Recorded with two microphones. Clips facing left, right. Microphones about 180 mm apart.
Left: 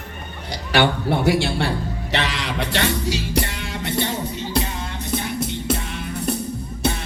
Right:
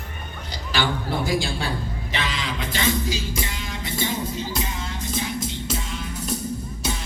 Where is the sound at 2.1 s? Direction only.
70° left (ahead or behind).